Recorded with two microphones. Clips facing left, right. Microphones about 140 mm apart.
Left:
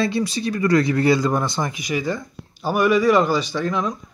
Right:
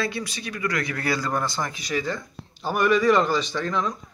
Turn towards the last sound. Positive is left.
turn(degrees=5)  # may be behind; listen again after turning